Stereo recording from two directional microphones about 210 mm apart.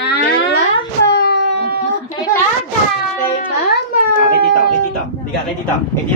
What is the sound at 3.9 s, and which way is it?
Speech, 45° left (ahead or behind).